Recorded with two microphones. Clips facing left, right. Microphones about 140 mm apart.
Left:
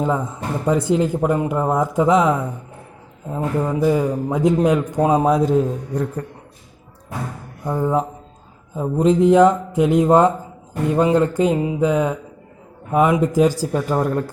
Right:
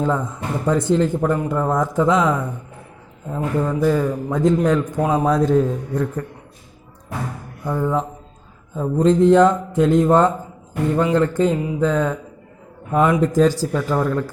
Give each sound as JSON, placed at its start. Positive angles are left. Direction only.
{"t": 0.0, "sound": "speech", "side_deg": 10}
{"t": 5.2, "sound": "speech", "side_deg": 10}
{"t": 5.9, "sound": "speech", "side_deg": 35}
{"t": 7.6, "sound": "speech", "side_deg": 20}
{"t": 8.7, "sound": "speech", "side_deg": 10}
{"t": 13.7, "sound": "speech", "side_deg": 25}